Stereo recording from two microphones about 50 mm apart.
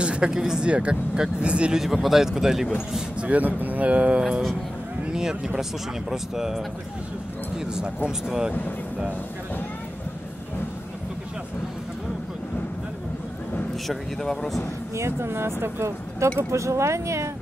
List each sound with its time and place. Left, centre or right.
0.0 s speech: centre
1.8 s speech: centre
3.2 s speech: right
5.0 s speech: centre
13.8 s a man's voice: centre
15.0 s speech: right